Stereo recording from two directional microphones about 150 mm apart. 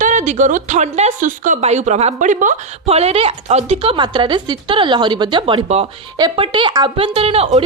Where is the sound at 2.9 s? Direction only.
45° right (ahead or behind).